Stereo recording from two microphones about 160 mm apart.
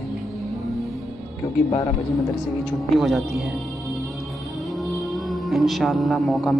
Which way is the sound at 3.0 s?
Centre (ahead or behind).